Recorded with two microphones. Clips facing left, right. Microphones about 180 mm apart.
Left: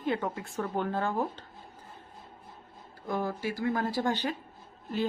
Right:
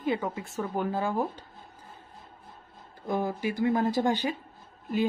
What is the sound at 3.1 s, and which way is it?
Speech, 20° right (ahead or behind).